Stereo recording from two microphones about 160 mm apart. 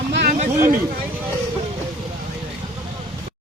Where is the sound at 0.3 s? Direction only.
55° right (ahead or behind).